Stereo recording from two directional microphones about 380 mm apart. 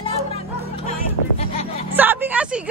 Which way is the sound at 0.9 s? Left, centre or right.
Centre.